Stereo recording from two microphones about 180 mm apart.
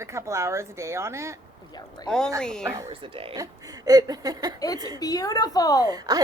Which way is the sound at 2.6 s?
15° right (ahead or behind).